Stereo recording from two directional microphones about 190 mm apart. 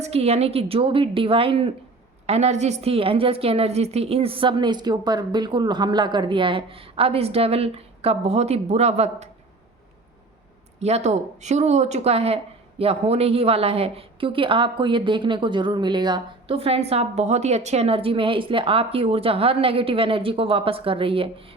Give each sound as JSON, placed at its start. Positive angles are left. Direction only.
{"t": 0.0, "sound": "a woman's voice", "side_deg": -35}
{"t": 10.8, "sound": "a woman's voice", "side_deg": -35}